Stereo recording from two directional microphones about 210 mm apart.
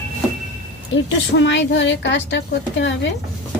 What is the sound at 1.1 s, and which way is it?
A woman's voice, 60° left (ahead or behind).